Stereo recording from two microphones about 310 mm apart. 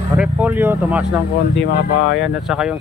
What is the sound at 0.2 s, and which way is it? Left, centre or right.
Vehicle, centre.